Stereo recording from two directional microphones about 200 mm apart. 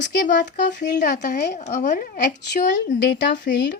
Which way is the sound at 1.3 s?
55° left (ahead or behind).